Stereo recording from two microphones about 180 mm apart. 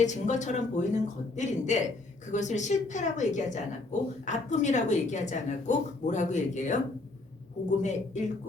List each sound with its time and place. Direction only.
0.0 s a woman's voice: 40° left (ahead or behind)
7.8 s a woman's voice: 40° left (ahead or behind)